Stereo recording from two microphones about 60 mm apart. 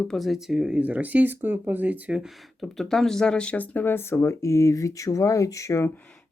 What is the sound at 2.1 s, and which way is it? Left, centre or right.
Speech, centre.